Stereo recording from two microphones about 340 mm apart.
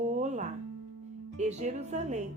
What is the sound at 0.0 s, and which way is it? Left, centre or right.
Music, right.